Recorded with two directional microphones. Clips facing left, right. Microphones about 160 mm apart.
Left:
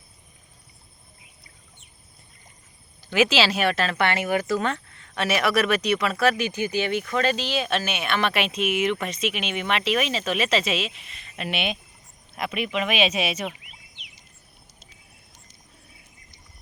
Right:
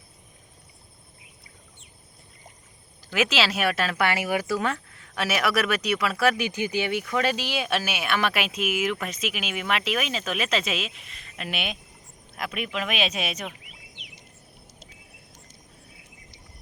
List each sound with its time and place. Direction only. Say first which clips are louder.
3.1 s speech: left 4 dB; centre (ahead or behind)
13.9 s bird: right 4 dB; 50° right (ahead or behind)